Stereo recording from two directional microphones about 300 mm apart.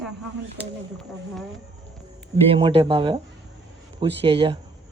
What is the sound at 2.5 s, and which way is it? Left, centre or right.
Speech, centre.